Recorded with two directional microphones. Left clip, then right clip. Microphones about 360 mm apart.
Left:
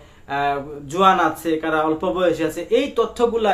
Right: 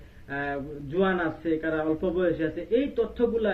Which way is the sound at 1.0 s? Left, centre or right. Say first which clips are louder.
Left 11 dB; left.